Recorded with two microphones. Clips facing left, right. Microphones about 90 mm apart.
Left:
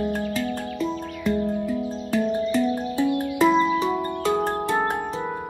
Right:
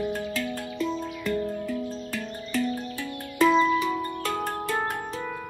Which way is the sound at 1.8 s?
5° left (ahead or behind).